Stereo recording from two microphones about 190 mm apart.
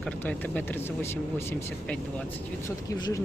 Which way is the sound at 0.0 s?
10° left (ahead or behind).